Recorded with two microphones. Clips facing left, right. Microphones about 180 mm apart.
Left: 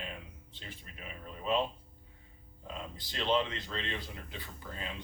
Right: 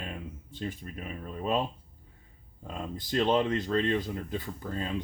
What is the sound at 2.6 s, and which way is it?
Speech, 50° right (ahead or behind).